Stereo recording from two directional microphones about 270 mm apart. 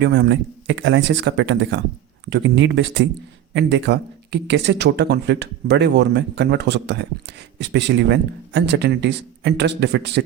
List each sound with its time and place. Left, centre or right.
0.0 s speech: right